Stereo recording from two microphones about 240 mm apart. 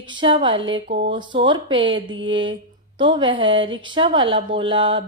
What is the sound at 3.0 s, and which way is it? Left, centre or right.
A woman's voice, centre.